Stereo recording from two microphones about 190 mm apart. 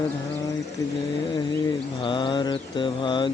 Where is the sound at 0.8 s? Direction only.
15° left (ahead or behind).